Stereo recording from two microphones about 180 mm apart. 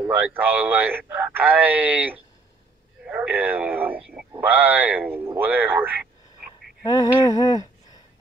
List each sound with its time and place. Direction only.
0.1 s speech: 10° right (ahead or behind)
6.8 s humming: 20° left (ahead or behind)